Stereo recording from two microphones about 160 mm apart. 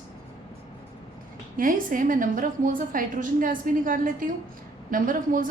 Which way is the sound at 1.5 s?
60° right (ahead or behind).